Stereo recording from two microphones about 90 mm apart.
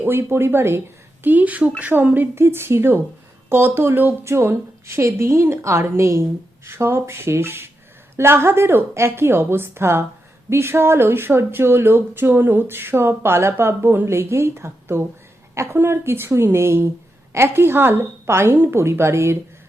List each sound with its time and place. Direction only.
0.0 s speech: 25° right (ahead or behind)